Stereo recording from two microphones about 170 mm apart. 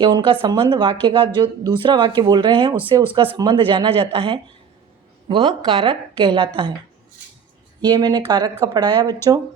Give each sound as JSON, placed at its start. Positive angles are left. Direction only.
{"t": 0.0, "sound": "speech", "side_deg": -25}
{"t": 7.8, "sound": "speech", "side_deg": -25}